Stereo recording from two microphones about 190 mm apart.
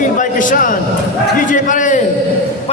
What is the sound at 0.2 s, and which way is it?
A man's voice, 45° left (ahead or behind).